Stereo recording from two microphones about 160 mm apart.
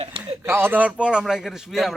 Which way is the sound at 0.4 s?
15° right (ahead or behind).